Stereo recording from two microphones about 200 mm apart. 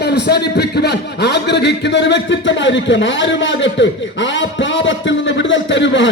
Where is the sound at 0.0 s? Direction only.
55° left (ahead or behind).